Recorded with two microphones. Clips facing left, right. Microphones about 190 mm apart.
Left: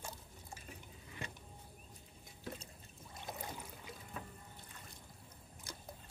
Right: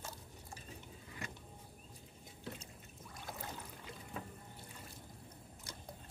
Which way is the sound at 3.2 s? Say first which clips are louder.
Left 1 dB; 20° left (ahead or behind).